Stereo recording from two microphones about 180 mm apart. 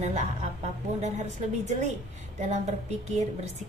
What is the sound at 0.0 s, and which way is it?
A woman's voice, 40° right (ahead or behind).